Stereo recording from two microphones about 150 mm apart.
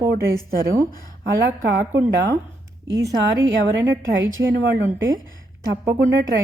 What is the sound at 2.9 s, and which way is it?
Speech, 25° right (ahead or behind).